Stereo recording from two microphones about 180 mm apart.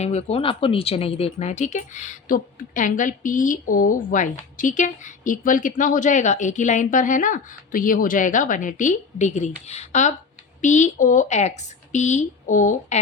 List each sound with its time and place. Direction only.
0.0 s a woman's voice: 35° left (ahead or behind)